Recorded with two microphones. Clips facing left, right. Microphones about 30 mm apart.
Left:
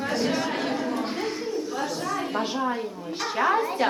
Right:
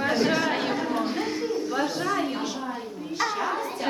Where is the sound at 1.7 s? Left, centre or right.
Right.